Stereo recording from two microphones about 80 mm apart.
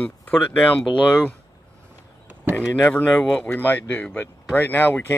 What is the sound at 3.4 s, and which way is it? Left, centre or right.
Speech, left.